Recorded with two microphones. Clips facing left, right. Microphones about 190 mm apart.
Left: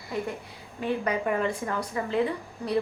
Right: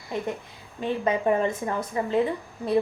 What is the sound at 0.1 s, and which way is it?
A woman's voice, 20° right (ahead or behind).